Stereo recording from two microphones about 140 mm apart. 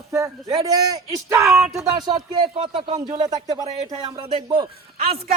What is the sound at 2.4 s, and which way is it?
Speech, 40° right (ahead or behind).